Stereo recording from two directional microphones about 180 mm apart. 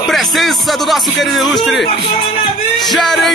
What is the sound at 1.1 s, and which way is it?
Speech, centre (ahead or behind).